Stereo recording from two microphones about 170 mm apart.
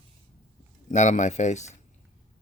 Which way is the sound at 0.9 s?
45° left (ahead or behind).